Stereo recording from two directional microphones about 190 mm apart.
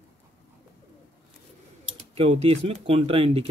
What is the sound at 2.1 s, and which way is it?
Speech, 30° right (ahead or behind).